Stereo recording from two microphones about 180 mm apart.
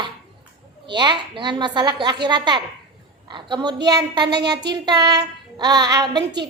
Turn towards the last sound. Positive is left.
turn(degrees=-25)  # may be behind; listen again after turning